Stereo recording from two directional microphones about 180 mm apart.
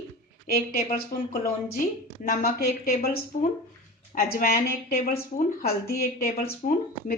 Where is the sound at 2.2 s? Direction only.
55° left (ahead or behind).